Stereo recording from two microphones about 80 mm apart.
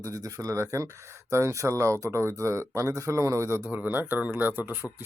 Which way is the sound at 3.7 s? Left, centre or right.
Right.